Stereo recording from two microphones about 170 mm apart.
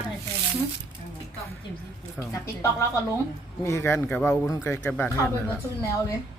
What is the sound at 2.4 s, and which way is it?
Speech, 20° left (ahead or behind).